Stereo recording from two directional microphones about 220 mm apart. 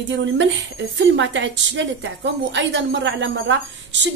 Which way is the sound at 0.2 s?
55° right (ahead or behind).